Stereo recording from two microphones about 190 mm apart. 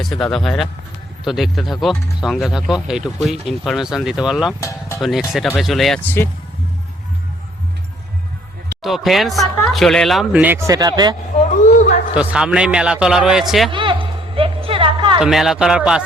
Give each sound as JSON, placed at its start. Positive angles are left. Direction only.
{"t": 0.0, "sound": "speech", "side_deg": 0}
{"t": 8.8, "sound": "speech", "side_deg": 0}
{"t": 11.6, "sound": "a sound", "side_deg": 40}
{"t": 12.1, "sound": "speech", "side_deg": -5}
{"t": 13.7, "sound": "a sound", "side_deg": -25}
{"t": 15.2, "sound": "speech", "side_deg": 0}